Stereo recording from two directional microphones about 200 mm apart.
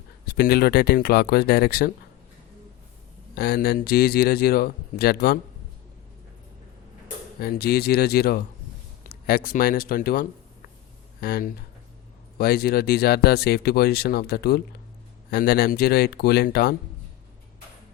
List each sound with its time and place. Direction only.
0.3 s speech: 50° left (ahead or behind)
3.3 s speech: 50° left (ahead or behind)
7.4 s speech: 50° left (ahead or behind)